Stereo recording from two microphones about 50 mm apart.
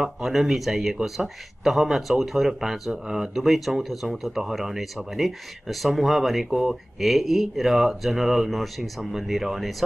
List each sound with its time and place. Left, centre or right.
0.0 s speech: centre